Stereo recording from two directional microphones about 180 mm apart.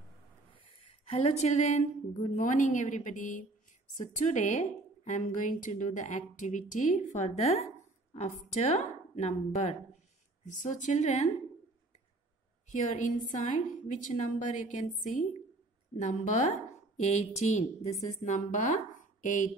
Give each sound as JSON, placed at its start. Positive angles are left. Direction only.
{"t": 0.7, "sound": "a woman's voice", "side_deg": 35}
{"t": 12.6, "sound": "a woman's voice", "side_deg": 45}
{"t": 16.0, "sound": "a woman's voice", "side_deg": 45}